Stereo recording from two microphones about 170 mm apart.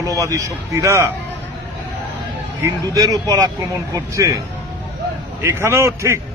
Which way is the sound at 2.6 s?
20° right (ahead or behind).